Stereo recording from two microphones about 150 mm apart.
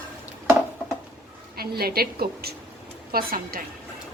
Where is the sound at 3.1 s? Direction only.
80° right.